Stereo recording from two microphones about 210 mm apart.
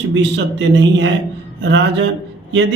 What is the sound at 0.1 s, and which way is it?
Speech, 55° right (ahead or behind).